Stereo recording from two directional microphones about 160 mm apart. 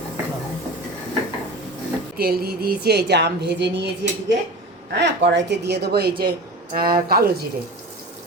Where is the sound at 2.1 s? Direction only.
70° right (ahead or behind).